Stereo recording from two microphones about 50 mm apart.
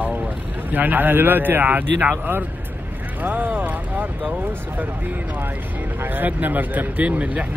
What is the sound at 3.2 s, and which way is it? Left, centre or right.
Speech, right.